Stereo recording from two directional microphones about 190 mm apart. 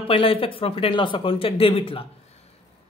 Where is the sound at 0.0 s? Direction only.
30° left (ahead or behind).